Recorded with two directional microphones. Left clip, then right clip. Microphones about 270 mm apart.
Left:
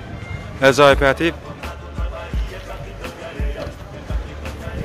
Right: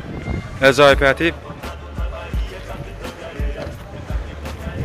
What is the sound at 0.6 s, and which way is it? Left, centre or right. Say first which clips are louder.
Music: even; centre.